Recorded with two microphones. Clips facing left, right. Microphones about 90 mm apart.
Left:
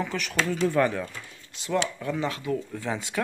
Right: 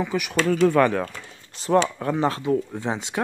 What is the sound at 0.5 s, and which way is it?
Speech, 70° right (ahead or behind).